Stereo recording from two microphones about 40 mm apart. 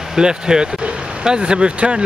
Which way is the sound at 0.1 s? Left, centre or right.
Centre.